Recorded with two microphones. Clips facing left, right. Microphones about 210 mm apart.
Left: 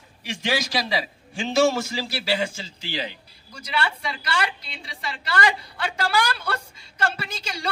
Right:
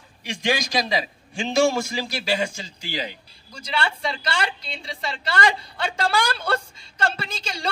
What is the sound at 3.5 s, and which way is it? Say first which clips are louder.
A woman's voice: right 1 dB; 25° right (ahead or behind).